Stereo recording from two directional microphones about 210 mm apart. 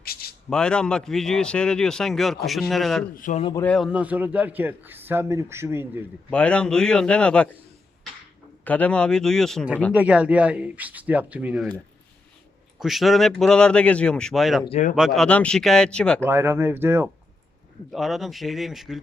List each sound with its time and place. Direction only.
0.0 s a sound: 45° left (ahead or behind)
0.5 s speech: 5° left (ahead or behind)
3.2 s speech: 35° left (ahead or behind)
3.6 s a man's voice: centre (ahead or behind)
6.3 s speech: 5° left (ahead or behind)
8.6 s a man's voice: 5° left (ahead or behind)
12.8 s speech: centre (ahead or behind)
14.6 s speech: 30° left (ahead or behind)
14.9 s speech: centre (ahead or behind)
16.2 s a man's voice: 10° right (ahead or behind)
17.9 s speech: centre (ahead or behind)